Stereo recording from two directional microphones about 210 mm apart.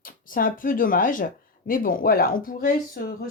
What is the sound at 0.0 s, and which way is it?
Speech, 40° left (ahead or behind).